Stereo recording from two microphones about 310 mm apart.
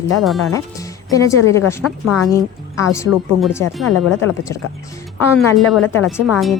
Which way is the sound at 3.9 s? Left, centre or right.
Left.